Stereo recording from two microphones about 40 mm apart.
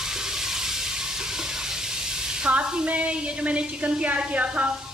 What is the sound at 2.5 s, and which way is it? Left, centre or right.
A woman's voice, right.